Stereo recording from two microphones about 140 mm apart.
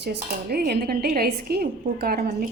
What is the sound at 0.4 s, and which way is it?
A woman's voice, 90° right.